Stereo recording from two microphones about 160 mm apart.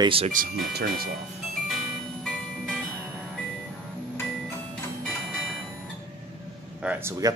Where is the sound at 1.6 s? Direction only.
Centre (ahead or behind).